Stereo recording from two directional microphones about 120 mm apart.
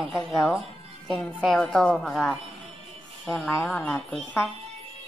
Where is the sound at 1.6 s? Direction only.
5° left (ahead or behind).